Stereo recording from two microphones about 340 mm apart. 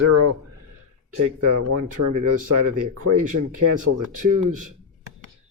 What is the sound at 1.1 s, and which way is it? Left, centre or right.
Speech, right.